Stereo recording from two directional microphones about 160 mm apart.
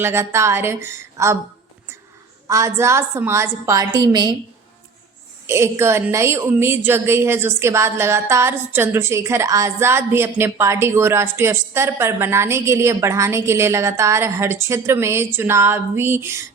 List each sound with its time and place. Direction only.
0.0 s a woman's voice: 15° right (ahead or behind)
2.5 s a woman's voice: 20° right (ahead or behind)
5.5 s a woman's voice: 15° right (ahead or behind)